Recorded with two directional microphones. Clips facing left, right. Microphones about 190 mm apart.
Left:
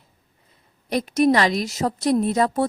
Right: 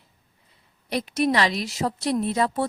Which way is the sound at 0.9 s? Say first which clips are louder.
Left 5 dB; 45° left (ahead or behind).